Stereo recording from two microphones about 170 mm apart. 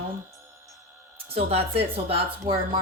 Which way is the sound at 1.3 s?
35° right (ahead or behind).